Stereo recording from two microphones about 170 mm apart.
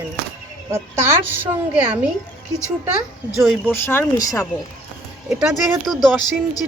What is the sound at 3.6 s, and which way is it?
Speech, 15° left (ahead or behind).